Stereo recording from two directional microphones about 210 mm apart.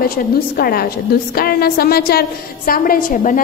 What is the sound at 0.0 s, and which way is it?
A woman's voice, 45° left (ahead or behind).